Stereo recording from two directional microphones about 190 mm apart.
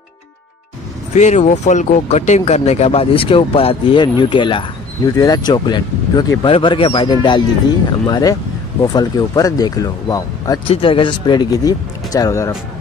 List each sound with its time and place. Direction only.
1.1 s speech: 35° left (ahead or behind); by 12.5 s 15° left (ahead or behind)